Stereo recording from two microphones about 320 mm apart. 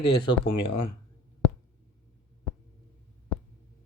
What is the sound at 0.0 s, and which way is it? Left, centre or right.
Speech, centre.